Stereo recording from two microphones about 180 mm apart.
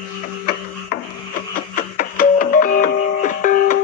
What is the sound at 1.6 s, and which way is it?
Music, 55° left (ahead or behind).